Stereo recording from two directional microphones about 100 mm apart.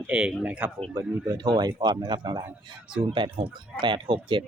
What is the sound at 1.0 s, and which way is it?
Speech, 40° right (ahead or behind).